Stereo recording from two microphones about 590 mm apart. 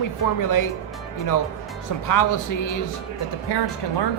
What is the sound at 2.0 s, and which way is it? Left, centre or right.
Speech, left.